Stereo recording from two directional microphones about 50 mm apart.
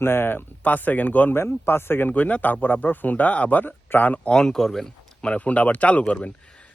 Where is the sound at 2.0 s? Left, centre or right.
Left.